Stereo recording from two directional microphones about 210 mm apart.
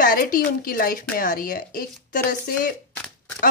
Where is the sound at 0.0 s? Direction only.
40° left (ahead or behind).